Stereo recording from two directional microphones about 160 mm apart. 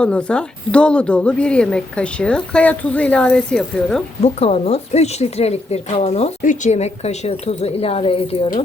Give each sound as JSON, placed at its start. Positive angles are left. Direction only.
{"t": 0.0, "sound": "a woman's voice", "side_deg": 5}
{"t": 4.2, "sound": "speech", "side_deg": 40}
{"t": 6.4, "sound": "speech", "side_deg": 55}